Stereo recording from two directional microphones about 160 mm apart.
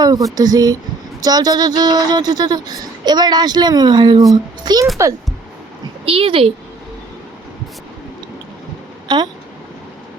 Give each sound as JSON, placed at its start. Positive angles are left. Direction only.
{"t": 0.0, "sound": "a child's voice", "side_deg": -25}
{"t": 6.1, "sound": "a woman's voice", "side_deg": -35}
{"t": 9.0, "sound": "speech", "side_deg": -25}